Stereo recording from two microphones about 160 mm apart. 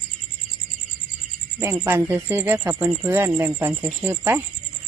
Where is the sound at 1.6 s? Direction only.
15° right (ahead or behind).